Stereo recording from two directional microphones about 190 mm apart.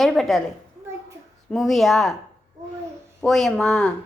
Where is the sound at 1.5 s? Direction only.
Centre (ahead or behind).